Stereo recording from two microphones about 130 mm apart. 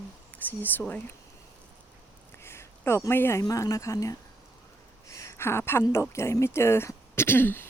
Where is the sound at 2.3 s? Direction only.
20° left (ahead or behind).